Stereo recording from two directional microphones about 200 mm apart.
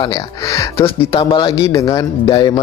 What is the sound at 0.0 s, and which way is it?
Speech, 20° left (ahead or behind).